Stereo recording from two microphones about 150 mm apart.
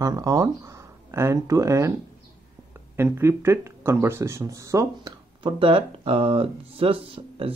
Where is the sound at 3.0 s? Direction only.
15° right (ahead or behind).